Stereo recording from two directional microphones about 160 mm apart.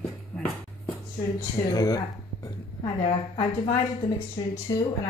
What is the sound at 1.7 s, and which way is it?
A woman's voice, 25° left (ahead or behind).